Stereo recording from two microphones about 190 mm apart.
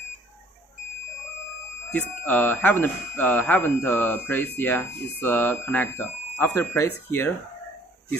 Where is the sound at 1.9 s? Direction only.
10° left (ahead or behind).